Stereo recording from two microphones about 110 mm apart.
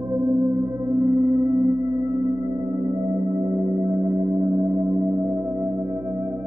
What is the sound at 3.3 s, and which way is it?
Singing bowl, 35° right (ahead or behind).